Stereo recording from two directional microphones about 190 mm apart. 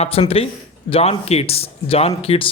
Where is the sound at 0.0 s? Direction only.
30° left (ahead or behind).